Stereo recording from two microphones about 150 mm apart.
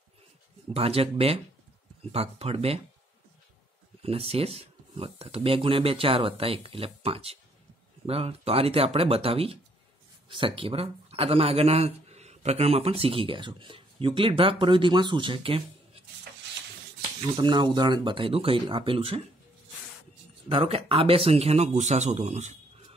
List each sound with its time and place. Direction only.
0.7 s speech: 40° right (ahead or behind)
4.0 s speech: 40° right (ahead or behind)
17.4 s speech: 30° right (ahead or behind)
20.4 s speech: 40° right (ahead or behind)